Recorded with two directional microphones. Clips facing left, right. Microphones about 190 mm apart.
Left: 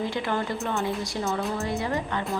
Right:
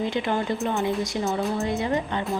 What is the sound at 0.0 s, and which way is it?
A woman's voice, 20° right (ahead or behind).